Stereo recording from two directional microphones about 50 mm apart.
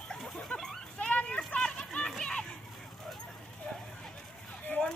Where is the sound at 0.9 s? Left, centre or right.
Left.